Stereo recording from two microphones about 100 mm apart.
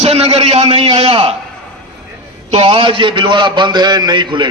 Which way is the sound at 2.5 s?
80° right.